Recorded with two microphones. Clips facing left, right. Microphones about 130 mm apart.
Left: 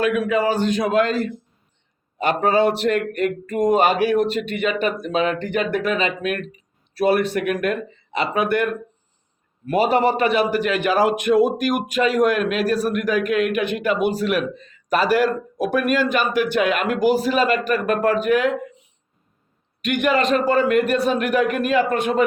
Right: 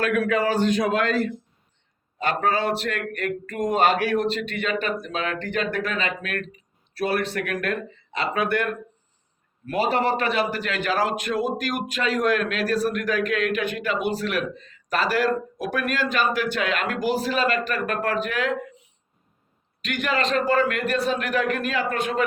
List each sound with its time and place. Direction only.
0.0 s speech: 15° left (ahead or behind)
2.1 s speech: 20° left (ahead or behind)
9.6 s speech: 15° left (ahead or behind)
15.6 s speech: 15° left (ahead or behind)
19.8 s speech: 15° left (ahead or behind)